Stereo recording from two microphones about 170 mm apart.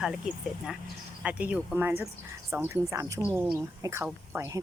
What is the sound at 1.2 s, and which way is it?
Speech, 5° right (ahead or behind).